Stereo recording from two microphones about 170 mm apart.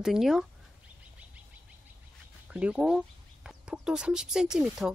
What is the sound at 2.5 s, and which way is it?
Speech, 5° right (ahead or behind).